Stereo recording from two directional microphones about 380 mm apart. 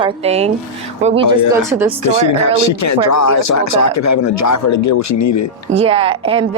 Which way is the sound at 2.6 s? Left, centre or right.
Left.